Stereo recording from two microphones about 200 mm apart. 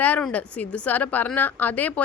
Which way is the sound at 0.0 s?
5° left (ahead or behind).